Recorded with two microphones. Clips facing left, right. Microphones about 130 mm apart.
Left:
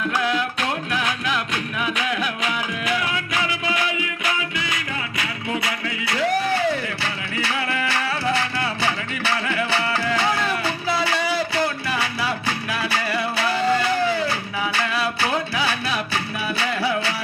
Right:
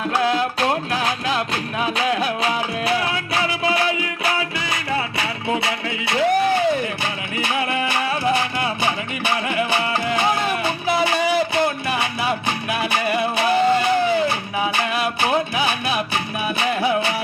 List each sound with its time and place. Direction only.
0.0 s music: 35° right (ahead or behind)